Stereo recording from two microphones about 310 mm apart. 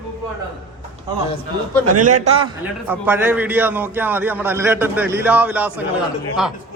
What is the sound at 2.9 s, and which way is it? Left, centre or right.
A man's voice, centre.